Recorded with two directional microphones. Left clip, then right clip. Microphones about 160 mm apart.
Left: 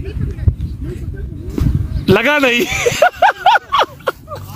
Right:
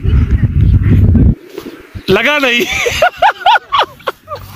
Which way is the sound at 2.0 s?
65° left (ahead or behind).